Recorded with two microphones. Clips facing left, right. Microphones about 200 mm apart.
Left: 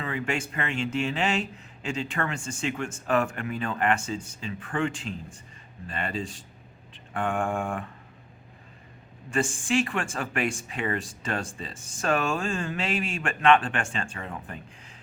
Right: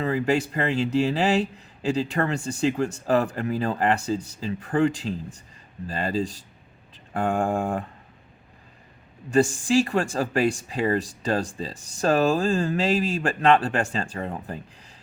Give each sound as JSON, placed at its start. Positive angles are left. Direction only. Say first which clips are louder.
{"t": 0.0, "sound": "speech", "louder": "right 7 dB", "side_deg": -35}
{"t": 9.3, "sound": "speech", "louder": "right 6 dB", "side_deg": -40}